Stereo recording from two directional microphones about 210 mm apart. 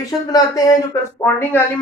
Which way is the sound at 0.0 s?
15° left (ahead or behind).